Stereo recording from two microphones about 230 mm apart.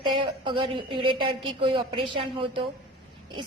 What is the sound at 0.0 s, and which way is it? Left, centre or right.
A woman's voice, right.